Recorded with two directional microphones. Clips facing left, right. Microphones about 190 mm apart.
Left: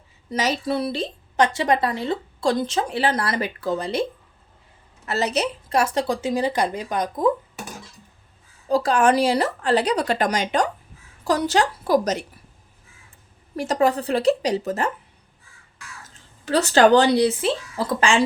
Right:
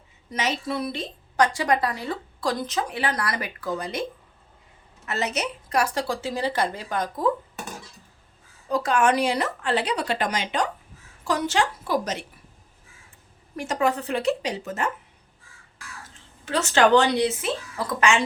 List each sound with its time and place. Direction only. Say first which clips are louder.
0.3 s a woman's voice: left 4 dB; 35° left (ahead or behind)
5.0 s a woman's voice: left 5 dB; 35° left (ahead or behind); by 7.3 s 15° left (ahead or behind)
8.7 s speech: left 3 dB; 35° left (ahead or behind)
13.6 s speech: left 4 dB; 35° left (ahead or behind)
16.5 s speech: left 3 dB; 35° left (ahead or behind)